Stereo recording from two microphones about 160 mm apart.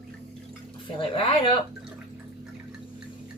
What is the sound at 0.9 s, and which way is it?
Speech, 35° left (ahead or behind).